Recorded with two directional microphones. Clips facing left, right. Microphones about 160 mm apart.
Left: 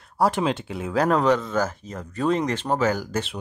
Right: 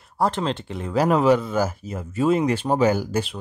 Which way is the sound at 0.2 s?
10° left (ahead or behind).